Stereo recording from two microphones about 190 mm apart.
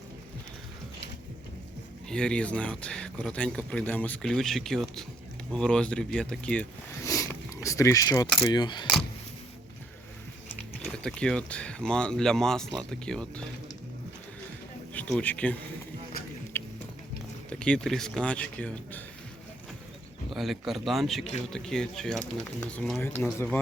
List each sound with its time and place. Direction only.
2.0 s speech: 5° left (ahead or behind)
7.1 s a sound: 15° left (ahead or behind)
8.4 s speech: 20° left (ahead or behind)
10.8 s speech: 5° left (ahead or behind)
14.9 s speech: 10° left (ahead or behind)
16.5 s a sound: 10° left (ahead or behind)
17.5 s speech: 5° left (ahead or behind)
20.3 s speech: centre (ahead or behind)